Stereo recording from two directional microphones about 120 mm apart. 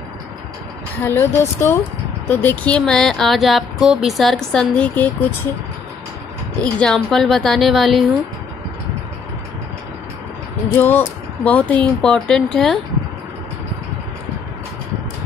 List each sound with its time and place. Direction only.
1.0 s speech: 25° left (ahead or behind)
6.6 s speech: 5° left (ahead or behind)
10.8 s speech: 15° left (ahead or behind)